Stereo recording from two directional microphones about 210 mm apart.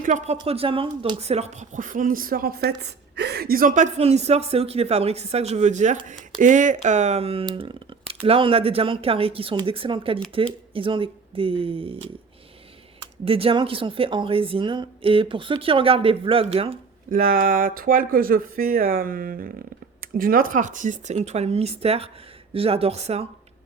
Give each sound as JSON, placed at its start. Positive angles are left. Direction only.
{"t": 0.0, "sound": "speech", "side_deg": -35}
{"t": 13.0, "sound": "speech", "side_deg": -25}
{"t": 17.1, "sound": "speech", "side_deg": -40}